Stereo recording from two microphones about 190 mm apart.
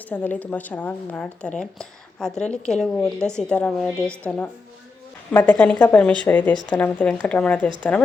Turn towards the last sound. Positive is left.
turn(degrees=5)  # may be behind; listen again after turning